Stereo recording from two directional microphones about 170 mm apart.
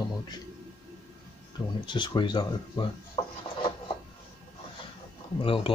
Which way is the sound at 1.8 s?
25° left (ahead or behind).